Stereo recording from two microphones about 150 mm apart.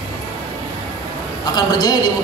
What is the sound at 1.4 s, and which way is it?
Speech, 25° left (ahead or behind).